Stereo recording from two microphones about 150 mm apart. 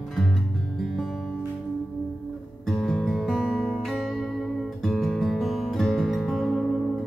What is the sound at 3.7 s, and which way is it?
Music, centre (ahead or behind).